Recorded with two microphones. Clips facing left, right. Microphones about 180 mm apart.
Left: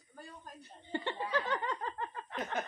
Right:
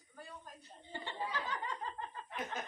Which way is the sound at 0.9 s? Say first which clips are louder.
Left 7 dB; 70° left (ahead or behind).